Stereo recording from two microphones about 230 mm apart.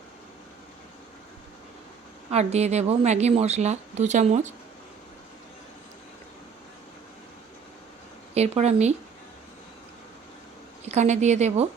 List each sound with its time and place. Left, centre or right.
2.3 s a woman's voice: right
8.4 s a woman's voice: right
10.8 s a woman's voice: right